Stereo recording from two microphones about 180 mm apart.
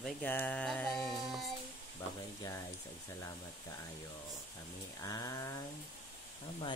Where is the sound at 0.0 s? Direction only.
10° left (ahead or behind).